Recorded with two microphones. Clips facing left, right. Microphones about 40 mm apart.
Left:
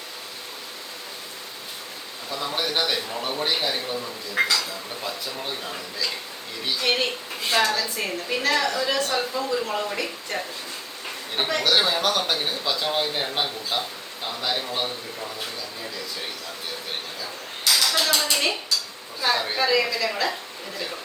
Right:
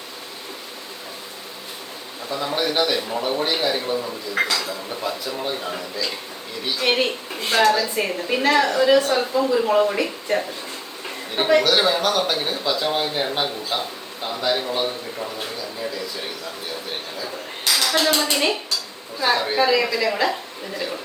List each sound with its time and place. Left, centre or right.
2.3 s speech: centre
7.9 s speech: centre
11.6 s speech: centre
17.7 s a woman's voice: centre